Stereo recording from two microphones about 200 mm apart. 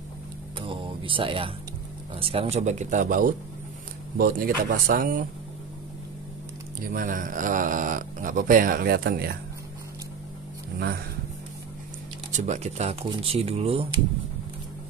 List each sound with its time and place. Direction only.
0.6 s a sound: 25° right (ahead or behind)
2.1 s speech: 30° right (ahead or behind); by 5.2 s 45° right (ahead or behind)
6.9 s speech: 45° right (ahead or behind)
12.3 s speech: 35° right (ahead or behind)